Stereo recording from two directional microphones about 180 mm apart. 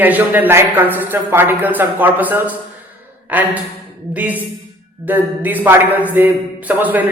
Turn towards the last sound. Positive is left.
turn(degrees=-10)  # may be behind; listen again after turning